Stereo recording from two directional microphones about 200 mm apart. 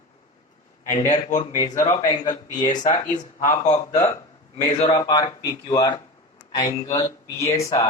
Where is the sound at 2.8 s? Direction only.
35° left (ahead or behind).